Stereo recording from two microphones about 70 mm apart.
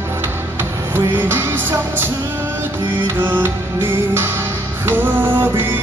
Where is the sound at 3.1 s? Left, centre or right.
Right.